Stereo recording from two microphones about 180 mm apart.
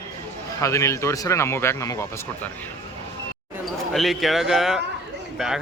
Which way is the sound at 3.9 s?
Centre (ahead or behind).